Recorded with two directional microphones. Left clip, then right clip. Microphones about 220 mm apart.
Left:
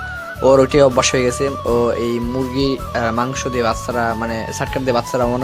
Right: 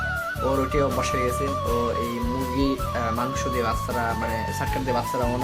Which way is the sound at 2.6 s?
35° left (ahead or behind).